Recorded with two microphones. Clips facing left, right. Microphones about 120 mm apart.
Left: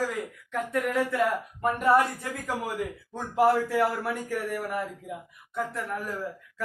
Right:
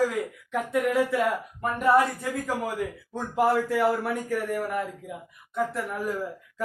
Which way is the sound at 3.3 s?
Centre (ahead or behind).